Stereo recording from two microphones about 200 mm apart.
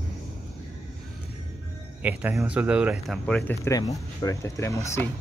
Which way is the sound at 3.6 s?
15° left (ahead or behind).